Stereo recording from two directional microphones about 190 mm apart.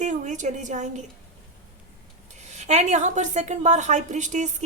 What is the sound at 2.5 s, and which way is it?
Speech, 35° right (ahead or behind).